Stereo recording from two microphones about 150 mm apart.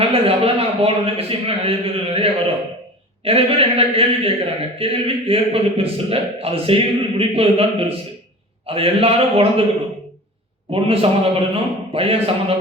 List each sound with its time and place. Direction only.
0.1 s a man's voice: 40° right (ahead or behind)
10.7 s a man's voice: 40° right (ahead or behind)